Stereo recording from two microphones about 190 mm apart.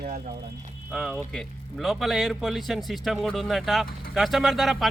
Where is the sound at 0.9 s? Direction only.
Centre (ahead or behind).